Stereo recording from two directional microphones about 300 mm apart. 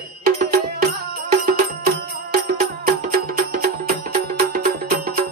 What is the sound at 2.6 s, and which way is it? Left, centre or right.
Music, right.